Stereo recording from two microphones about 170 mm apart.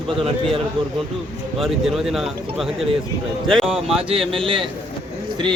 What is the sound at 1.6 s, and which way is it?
Speech, centre (ahead or behind).